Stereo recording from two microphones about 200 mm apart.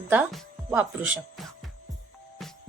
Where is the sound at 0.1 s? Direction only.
5° right (ahead or behind).